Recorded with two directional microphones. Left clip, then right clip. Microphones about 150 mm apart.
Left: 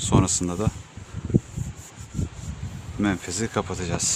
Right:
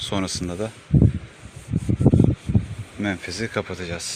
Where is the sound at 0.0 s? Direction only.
15° left (ahead or behind).